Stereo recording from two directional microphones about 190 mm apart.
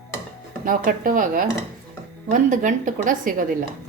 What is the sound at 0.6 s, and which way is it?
A woman's voice, 45° right (ahead or behind).